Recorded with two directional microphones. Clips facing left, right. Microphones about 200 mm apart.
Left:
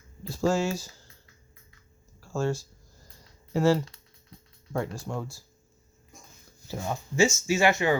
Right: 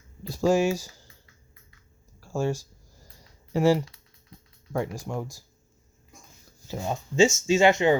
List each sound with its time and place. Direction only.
0.3 s speech: 15° right (ahead or behind)
2.3 s a sound: 10° right (ahead or behind)
4.7 s speech: 10° right (ahead or behind)
6.7 s speech: 20° right (ahead or behind)